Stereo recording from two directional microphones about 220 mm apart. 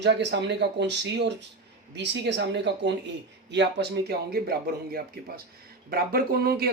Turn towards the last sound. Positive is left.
turn(degrees=-45)  # may be behind; listen again after turning